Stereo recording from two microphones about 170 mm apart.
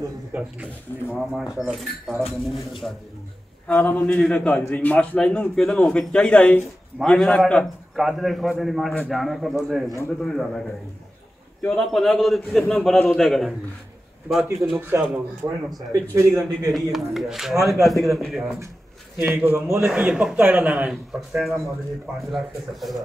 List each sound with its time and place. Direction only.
0.3 s a man's voice: 10° right (ahead or behind)
3.6 s a man's voice: 10° left (ahead or behind)
9.8 s a man's voice: 15° left (ahead or behind)
10.2 s a man's voice: 5° left (ahead or behind)
14.8 s a man's voice: 15° right (ahead or behind)
16.7 s a man's voice: centre (ahead or behind)